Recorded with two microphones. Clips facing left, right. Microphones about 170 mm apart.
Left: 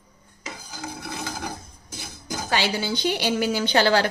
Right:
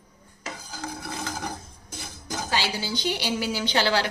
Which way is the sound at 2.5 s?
60° left (ahead or behind).